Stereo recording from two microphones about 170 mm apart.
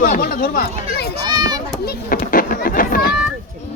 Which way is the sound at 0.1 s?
60° left (ahead or behind).